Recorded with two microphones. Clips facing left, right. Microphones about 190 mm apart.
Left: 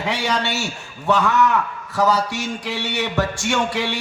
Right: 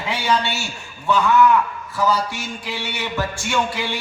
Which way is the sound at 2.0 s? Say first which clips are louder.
Left 2 dB; 80° left.